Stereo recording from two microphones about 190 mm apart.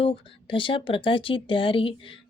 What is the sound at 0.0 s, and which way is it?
A woman's voice, 30° left (ahead or behind).